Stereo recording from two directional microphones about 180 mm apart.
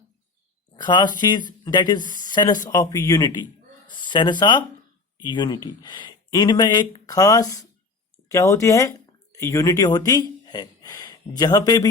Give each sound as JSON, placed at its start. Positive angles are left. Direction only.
{"t": 0.8, "sound": "speech", "side_deg": 25}